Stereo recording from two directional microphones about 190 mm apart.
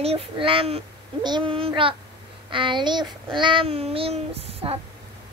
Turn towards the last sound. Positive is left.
turn(degrees=-30)  # may be behind; listen again after turning